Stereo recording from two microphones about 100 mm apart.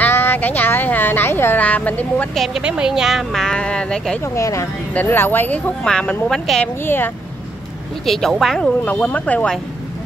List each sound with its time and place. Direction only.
0.0 s speech: 20° left (ahead or behind)
2.3 s speech: centre (ahead or behind)
4.2 s speech: 30° left (ahead or behind)
5.9 s speech: 10° left (ahead or behind)
6.8 s speech: 20° left (ahead or behind)
8.0 s speech: 5° left (ahead or behind)
8.8 s speech: 15° left (ahead or behind)